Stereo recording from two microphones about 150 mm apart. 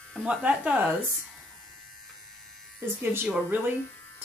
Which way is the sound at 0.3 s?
10° right (ahead or behind).